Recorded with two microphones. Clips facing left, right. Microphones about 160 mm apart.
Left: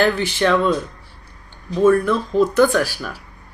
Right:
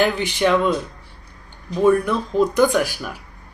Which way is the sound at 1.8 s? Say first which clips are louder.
Left 2 dB; 15° right (ahead or behind).